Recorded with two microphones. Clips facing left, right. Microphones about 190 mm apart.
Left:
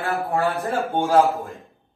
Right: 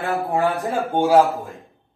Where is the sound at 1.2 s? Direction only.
Centre (ahead or behind).